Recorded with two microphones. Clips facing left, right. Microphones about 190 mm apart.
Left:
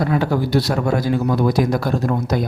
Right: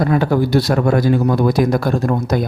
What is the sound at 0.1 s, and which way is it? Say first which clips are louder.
A man's voice: right 3 dB; 50° right (ahead or behind).